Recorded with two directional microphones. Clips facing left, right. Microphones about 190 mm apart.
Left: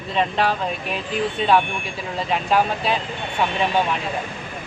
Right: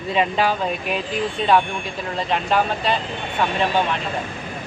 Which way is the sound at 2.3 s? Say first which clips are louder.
Left 1 dB; 5° left (ahead or behind).